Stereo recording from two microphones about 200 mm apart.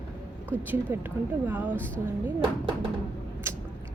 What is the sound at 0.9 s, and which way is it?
Speech, 15° right (ahead or behind).